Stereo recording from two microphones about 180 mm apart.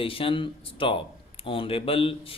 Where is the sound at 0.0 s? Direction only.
30° left (ahead or behind).